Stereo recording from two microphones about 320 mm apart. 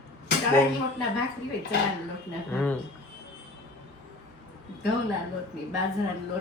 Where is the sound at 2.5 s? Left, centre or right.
Centre.